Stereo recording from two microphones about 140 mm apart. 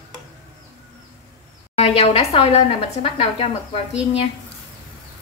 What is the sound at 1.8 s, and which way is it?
A woman's voice, 45° left (ahead or behind).